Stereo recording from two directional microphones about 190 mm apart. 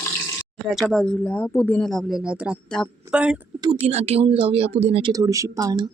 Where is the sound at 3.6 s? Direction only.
30° right (ahead or behind).